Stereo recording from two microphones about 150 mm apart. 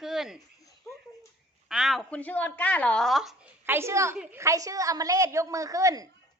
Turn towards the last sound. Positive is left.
turn(degrees=-20)  # may be behind; listen again after turning